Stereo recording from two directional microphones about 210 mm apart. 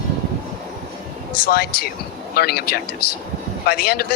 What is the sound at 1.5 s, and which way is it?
Speech, 45° left (ahead or behind).